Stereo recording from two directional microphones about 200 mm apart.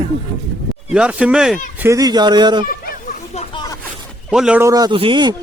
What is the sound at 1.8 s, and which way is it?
Speech, 15° right (ahead or behind).